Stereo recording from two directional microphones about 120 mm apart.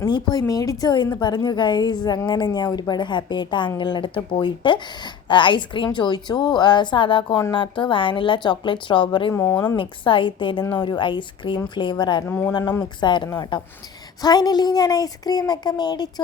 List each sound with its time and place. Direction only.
0.1 s a woman's voice: 35° left (ahead or behind)
9.3 s speech: 20° left (ahead or behind)
9.7 s a woman's voice: 45° left (ahead or behind)